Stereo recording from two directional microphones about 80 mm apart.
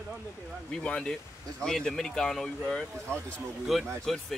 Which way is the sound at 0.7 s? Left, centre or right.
Centre.